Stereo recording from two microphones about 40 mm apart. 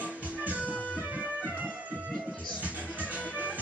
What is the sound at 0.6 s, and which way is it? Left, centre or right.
Music, left.